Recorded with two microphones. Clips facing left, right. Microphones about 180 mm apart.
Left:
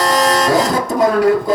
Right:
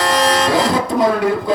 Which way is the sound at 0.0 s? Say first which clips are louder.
Left 1 dB; 45° left (ahead or behind).